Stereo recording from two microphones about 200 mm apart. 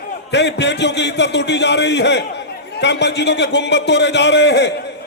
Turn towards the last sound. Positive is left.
turn(degrees=60)  # may be behind; listen again after turning